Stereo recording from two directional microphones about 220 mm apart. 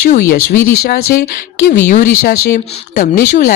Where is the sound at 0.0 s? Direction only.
40° left (ahead or behind).